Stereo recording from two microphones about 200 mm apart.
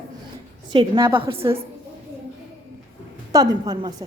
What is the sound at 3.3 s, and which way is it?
Speech, 20° right (ahead or behind).